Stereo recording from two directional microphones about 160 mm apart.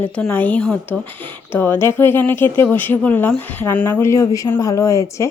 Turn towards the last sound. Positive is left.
turn(degrees=20)  # may be behind; listen again after turning